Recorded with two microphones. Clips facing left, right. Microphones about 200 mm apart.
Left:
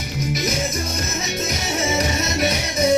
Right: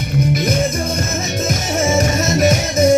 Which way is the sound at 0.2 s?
55° right (ahead or behind).